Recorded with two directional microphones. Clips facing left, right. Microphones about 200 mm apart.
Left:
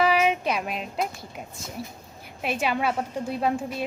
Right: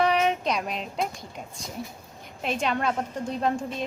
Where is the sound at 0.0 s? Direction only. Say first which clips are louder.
Left 1 dB; 5° left (ahead or behind).